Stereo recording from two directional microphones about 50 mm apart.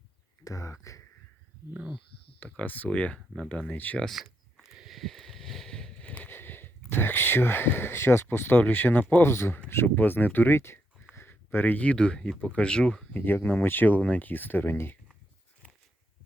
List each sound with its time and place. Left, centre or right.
0.6 s speech: left
2.4 s speech: left
4.1 s a sound: centre
6.2 s speech: left
9.2 s speech: left
9.9 s speech: left; by 13.1 s centre
13.1 s speech: left